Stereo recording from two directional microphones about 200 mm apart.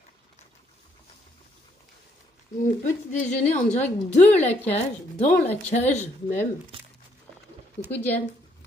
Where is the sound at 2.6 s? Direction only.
35° left (ahead or behind).